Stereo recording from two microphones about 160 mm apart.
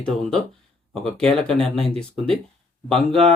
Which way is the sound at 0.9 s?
5° left (ahead or behind).